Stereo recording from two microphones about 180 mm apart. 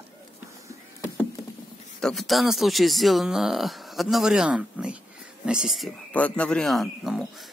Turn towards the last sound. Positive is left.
turn(degrees=0)  # may be behind; listen again after turning